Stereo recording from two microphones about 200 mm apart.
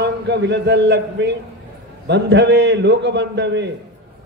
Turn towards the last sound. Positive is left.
turn(degrees=-60)  # may be behind; listen again after turning